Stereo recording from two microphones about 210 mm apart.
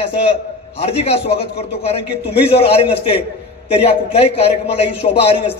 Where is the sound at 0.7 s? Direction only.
30° left (ahead or behind).